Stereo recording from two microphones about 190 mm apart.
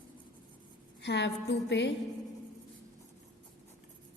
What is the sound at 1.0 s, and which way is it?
Speech, 65° left (ahead or behind).